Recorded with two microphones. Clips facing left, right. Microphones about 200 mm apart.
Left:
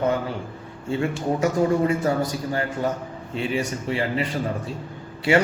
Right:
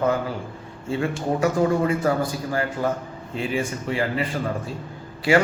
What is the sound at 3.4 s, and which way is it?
Speech, 35° left (ahead or behind).